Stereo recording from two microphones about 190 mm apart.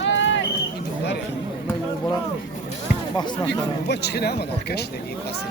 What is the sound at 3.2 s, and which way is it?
Speech, 20° left (ahead or behind).